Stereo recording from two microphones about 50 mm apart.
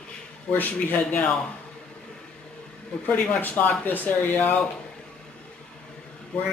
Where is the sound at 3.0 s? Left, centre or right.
Left.